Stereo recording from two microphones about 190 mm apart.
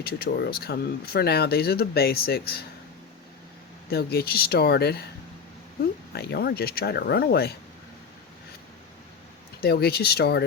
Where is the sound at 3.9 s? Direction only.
55° left (ahead or behind).